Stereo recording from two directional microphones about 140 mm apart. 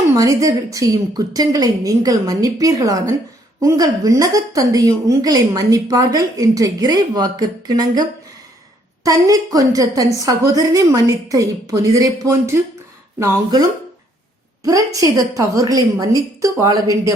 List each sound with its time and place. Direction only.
0.2 s a woman's voice: 25° right (ahead or behind)
9.0 s a woman's voice: 25° right (ahead or behind)
14.9 s a woman's voice: 25° right (ahead or behind)